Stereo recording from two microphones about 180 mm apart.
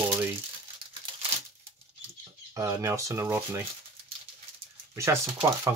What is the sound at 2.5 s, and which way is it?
Speech, 15° right (ahead or behind).